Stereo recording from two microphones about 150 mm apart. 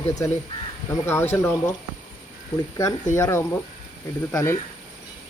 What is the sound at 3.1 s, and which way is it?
Speech, 20° left (ahead or behind).